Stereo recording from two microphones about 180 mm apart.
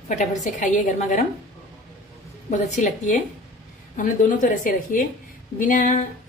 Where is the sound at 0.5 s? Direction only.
45° left (ahead or behind).